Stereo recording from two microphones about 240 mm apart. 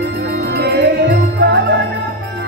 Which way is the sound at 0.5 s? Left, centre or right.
Right.